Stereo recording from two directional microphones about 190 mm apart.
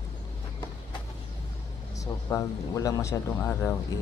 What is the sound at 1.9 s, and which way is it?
Speech, 15° left (ahead or behind).